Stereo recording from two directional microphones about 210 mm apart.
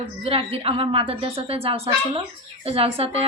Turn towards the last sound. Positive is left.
turn(degrees=-30)  # may be behind; listen again after turning